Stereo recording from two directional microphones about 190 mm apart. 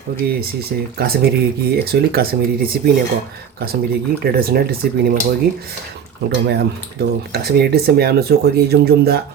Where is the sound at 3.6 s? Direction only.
50° right (ahead or behind).